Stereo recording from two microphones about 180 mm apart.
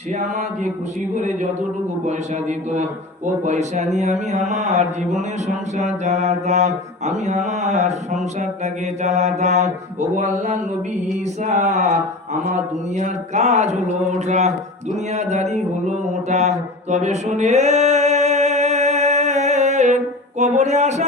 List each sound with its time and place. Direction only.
2.0 s mantra: 40° right (ahead or behind)
13.0 s mantra: 40° right (ahead or behind)